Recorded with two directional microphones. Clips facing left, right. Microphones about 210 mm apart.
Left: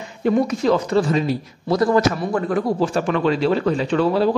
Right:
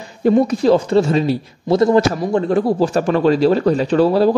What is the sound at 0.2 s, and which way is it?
A man's voice, 35° right (ahead or behind).